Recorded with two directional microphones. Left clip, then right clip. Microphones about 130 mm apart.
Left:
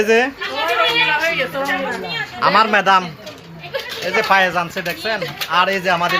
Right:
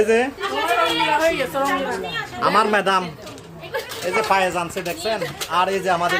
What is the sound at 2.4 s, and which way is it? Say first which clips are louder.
Speech: left 4 dB; 5° right (ahead or behind).